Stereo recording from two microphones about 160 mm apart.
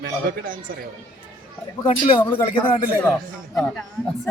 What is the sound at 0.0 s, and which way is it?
Speech, 65° right (ahead or behind).